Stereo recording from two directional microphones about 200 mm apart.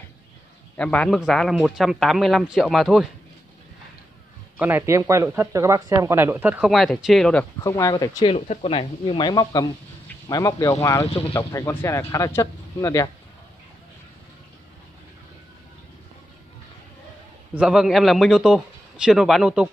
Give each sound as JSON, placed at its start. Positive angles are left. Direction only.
{"t": 0.7, "sound": "speech", "side_deg": 5}
{"t": 4.6, "sound": "speech", "side_deg": -10}
{"t": 7.6, "sound": "speech", "side_deg": 15}
{"t": 11.1, "sound": "speech", "side_deg": 30}
{"t": 11.3, "sound": "speech", "side_deg": 10}
{"t": 17.6, "sound": "speech", "side_deg": -5}